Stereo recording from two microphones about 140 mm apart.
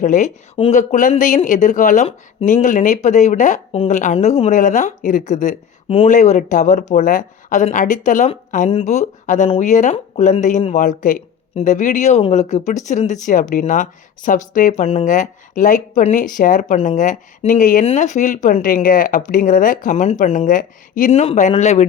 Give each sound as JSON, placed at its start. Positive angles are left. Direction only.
{"t": 0.0, "sound": "speech", "side_deg": 60}
{"t": 8.7, "sound": "speech", "side_deg": 55}
{"t": 9.9, "sound": "speech", "side_deg": 50}
{"t": 18.4, "sound": "speech", "side_deg": 75}
{"t": 20.1, "sound": "speech", "side_deg": 55}
{"t": 21.1, "sound": "speech", "side_deg": 50}